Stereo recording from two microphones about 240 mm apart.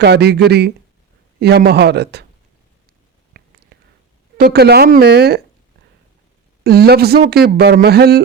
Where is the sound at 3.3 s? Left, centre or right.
Right.